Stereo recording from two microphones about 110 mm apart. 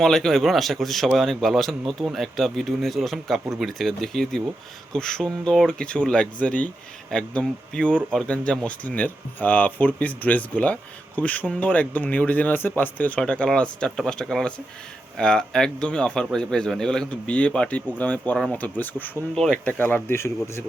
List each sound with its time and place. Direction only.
0.0 s a man's voice: 5° left (ahead or behind); by 20.7 s 25° left (ahead or behind)